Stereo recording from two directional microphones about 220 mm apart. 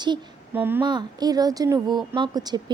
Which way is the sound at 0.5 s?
10° right (ahead or behind).